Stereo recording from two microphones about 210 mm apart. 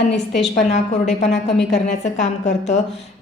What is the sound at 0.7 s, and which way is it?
A woman's voice, 35° left (ahead or behind).